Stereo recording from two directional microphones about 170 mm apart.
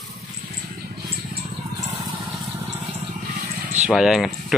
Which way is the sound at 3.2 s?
45° right (ahead or behind).